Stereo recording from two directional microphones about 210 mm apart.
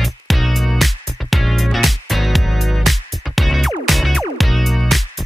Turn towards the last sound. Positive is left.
turn(degrees=0)  # may be behind; listen again after turning